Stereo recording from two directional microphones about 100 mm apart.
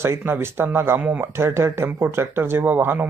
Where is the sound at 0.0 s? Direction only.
25° right (ahead or behind).